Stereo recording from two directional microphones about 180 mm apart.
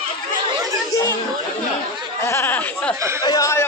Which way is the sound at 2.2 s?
15° left (ahead or behind).